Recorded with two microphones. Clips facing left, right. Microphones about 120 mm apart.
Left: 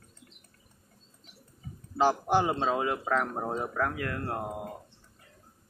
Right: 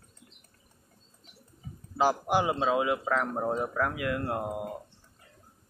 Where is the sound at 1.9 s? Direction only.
10° right (ahead or behind).